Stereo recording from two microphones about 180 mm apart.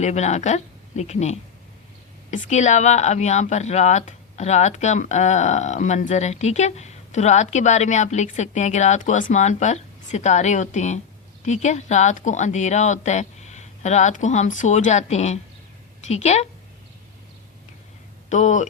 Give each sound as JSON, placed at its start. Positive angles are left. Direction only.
{"t": 0.0, "sound": "speech", "side_deg": 40}
{"t": 18.3, "sound": "speech", "side_deg": 40}